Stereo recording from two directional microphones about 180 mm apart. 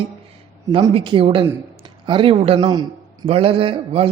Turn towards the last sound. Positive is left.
turn(degrees=-30)  # may be behind; listen again after turning